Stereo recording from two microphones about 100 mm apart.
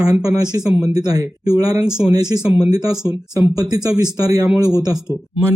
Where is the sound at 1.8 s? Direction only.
5° right (ahead or behind).